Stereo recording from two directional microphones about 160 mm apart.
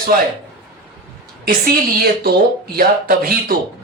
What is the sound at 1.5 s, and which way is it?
Speech, 65° right (ahead or behind).